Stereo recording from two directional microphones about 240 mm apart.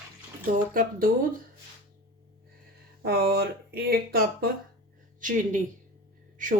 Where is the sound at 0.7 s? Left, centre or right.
Right.